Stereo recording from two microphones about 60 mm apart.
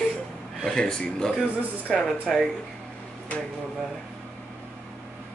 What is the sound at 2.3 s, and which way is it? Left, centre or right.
Speech, centre.